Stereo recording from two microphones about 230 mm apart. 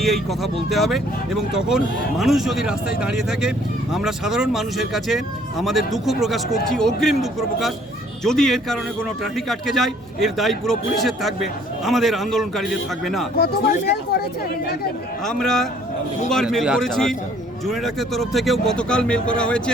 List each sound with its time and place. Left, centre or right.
0.0 s speech: centre
13.3 s speech: left
15.2 s speech: centre